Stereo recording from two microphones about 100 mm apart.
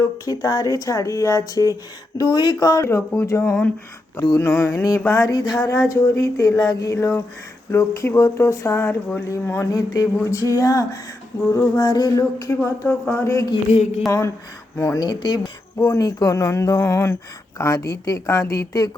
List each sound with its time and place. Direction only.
0.0 s speech: 35° left (ahead or behind)
3.2 s speech: 30° left (ahead or behind)
6.9 s speech: 25° left (ahead or behind)
8.9 s speech: 15° left (ahead or behind)
9.2 s speech: 25° left (ahead or behind)
9.7 s speech: 35° left (ahead or behind)
12.6 s speech: 20° left (ahead or behind)
13.5 s a sound: 75° left (ahead or behind)
14.8 s speech: 30° left (ahead or behind)
15.0 s speech: 45° left (ahead or behind)